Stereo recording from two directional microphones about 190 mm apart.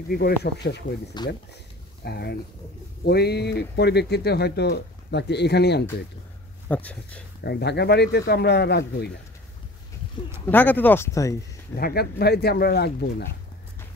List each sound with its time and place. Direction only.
0.1 s speech: 55° left (ahead or behind)
1.1 s speech: 20° left (ahead or behind)
2.0 s speech: 55° left (ahead or behind)
6.7 s speech: 5° left (ahead or behind)
7.4 s speech: 60° left (ahead or behind)
10.4 s speech: 10° left (ahead or behind)
11.7 s speech: 55° left (ahead or behind)